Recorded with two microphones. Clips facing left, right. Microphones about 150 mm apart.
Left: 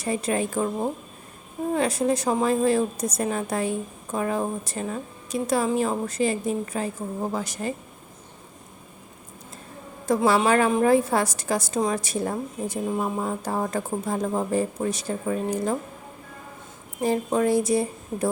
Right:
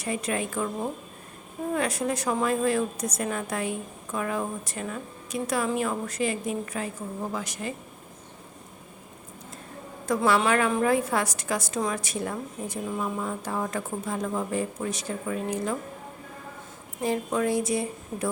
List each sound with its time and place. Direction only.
0.0 s a woman's voice: 30° left (ahead or behind)
10.2 s a woman's voice: 35° left (ahead or behind)
17.0 s a woman's voice: 35° left (ahead or behind)